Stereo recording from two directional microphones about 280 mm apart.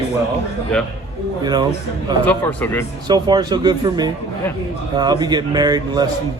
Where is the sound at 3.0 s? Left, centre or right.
Centre.